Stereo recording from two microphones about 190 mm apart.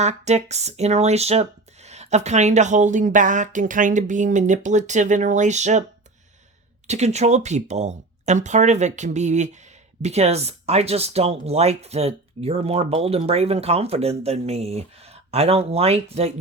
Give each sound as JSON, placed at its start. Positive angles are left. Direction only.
{"t": 0.0, "sound": "speech", "side_deg": -35}
{"t": 6.8, "sound": "speech", "side_deg": -35}